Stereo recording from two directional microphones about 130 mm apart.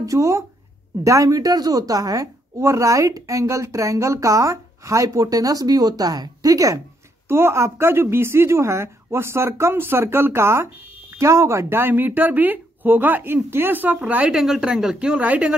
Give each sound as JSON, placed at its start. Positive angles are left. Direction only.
{"t": 0.0, "sound": "a woman's voice", "side_deg": -25}